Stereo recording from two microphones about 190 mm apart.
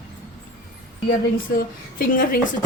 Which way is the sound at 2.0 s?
50° left (ahead or behind).